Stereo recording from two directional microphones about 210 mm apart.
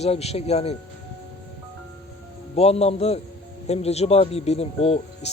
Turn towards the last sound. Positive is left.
turn(degrees=30)  # may be behind; listen again after turning